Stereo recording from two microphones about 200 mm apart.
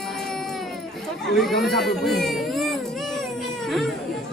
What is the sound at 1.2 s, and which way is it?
Speech, centre (ahead or behind).